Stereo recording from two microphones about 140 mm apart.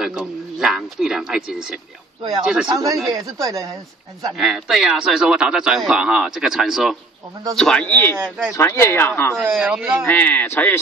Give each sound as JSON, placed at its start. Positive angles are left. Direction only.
{"t": 0.0, "sound": "speech", "side_deg": -5}
{"t": 2.7, "sound": "speech", "side_deg": -25}
{"t": 4.4, "sound": "speech", "side_deg": -5}
{"t": 9.4, "sound": "a man's voice", "side_deg": -5}
{"t": 10.0, "sound": "speech", "side_deg": 10}